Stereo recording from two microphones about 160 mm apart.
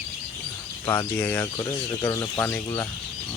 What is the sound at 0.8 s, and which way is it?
Speech, 15° left (ahead or behind).